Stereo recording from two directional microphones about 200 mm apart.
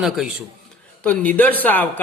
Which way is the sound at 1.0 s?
5° left (ahead or behind).